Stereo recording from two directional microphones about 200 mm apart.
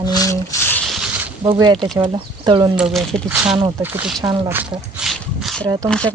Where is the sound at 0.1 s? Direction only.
15° left (ahead or behind).